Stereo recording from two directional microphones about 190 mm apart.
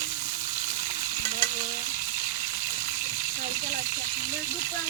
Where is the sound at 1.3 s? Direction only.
40° right (ahead or behind).